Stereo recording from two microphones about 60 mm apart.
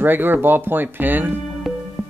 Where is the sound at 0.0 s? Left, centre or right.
Right.